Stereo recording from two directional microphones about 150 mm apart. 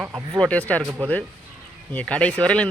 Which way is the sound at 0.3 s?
10° left (ahead or behind).